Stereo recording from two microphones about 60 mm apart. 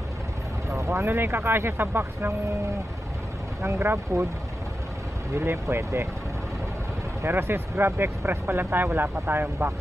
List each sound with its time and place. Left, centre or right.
0.7 s vehicle: right
1.0 s speech: right
3.6 s speech: right
5.4 s speech: right
7.2 s speech: right